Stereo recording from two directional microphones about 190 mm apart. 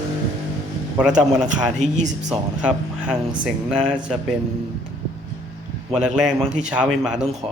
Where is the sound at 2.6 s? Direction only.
5° right (ahead or behind).